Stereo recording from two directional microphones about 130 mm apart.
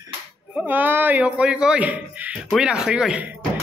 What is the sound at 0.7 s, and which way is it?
A man's voice, 15° right (ahead or behind).